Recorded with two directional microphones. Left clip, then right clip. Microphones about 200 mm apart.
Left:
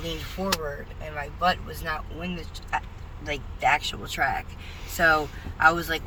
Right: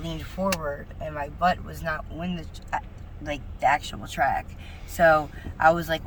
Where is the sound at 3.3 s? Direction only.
20° right (ahead or behind).